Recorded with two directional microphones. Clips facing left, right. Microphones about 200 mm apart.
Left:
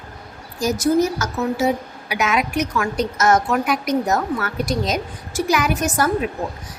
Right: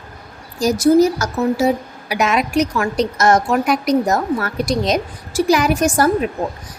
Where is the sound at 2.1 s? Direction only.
35° right (ahead or behind).